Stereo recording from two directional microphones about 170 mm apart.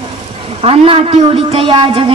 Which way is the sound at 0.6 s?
35° right (ahead or behind).